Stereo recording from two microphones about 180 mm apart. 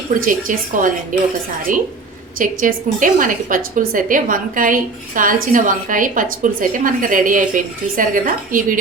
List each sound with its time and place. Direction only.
0.1 s a woman's voice: 50° right (ahead or behind)